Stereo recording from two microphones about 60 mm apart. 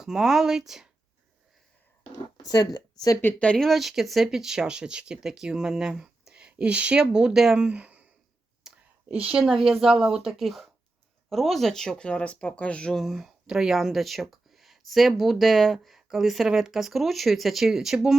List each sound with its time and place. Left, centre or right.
0.0 s speech: centre
2.4 s speech: left
3.3 s speech: centre
3.7 s speech: centre; by 8.0 s right
8.7 s whispering: centre
9.0 s speech: centre
9.4 s speech: centre
13.0 s speech: centre